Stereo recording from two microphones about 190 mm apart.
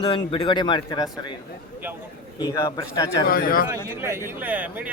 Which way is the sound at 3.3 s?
50° left (ahead or behind).